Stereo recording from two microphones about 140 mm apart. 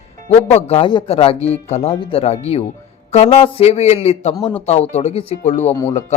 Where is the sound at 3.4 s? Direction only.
45° left (ahead or behind).